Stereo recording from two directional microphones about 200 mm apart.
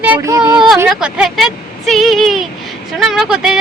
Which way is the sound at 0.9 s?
5° right (ahead or behind).